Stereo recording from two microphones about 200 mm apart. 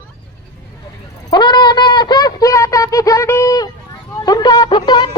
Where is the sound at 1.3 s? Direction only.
20° left (ahead or behind).